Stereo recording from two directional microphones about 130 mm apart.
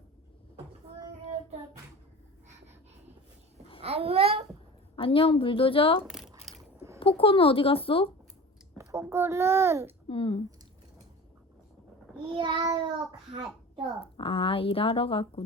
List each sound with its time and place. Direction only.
3.8 s babbling: 50° right (ahead or behind)
4.9 s speech: 45° left (ahead or behind)
8.8 s a child's voice: 25° right (ahead or behind)
10.1 s speech: 45° left (ahead or behind)
12.6 s a child's voice: 35° right (ahead or behind)
14.0 s speech: 45° left (ahead or behind)